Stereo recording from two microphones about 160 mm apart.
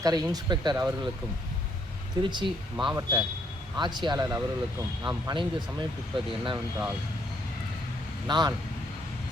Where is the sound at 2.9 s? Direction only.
20° right (ahead or behind).